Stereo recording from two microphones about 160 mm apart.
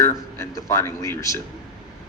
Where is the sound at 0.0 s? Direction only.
15° left (ahead or behind).